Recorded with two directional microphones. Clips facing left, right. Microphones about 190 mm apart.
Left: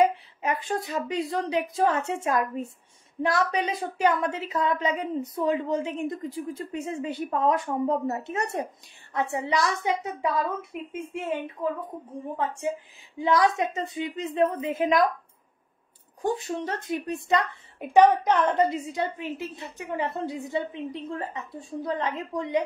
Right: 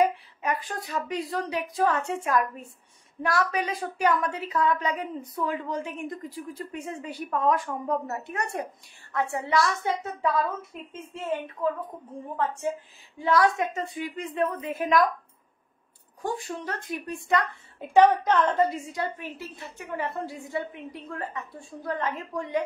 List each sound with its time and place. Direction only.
0.1 s a woman's voice: 25° left (ahead or behind)
13.2 s a woman's voice: 20° left (ahead or behind)
16.2 s a woman's voice: 25° left (ahead or behind)